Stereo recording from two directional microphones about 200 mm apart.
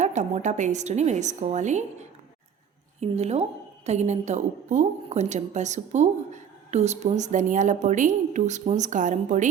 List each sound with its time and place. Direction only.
0.0 s a woman's voice: 35° right (ahead or behind)